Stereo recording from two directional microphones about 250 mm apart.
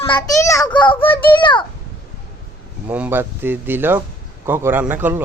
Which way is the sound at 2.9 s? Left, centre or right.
Centre.